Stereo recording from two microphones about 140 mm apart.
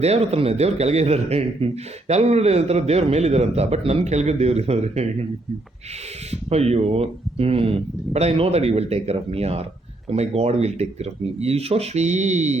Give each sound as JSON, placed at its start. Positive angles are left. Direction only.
{"t": 0.0, "sound": "a man's voice", "side_deg": -50}
{"t": 6.5, "sound": "a man's voice", "side_deg": -50}